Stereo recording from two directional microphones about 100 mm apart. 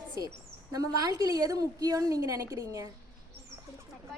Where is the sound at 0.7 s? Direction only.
40° right (ahead or behind).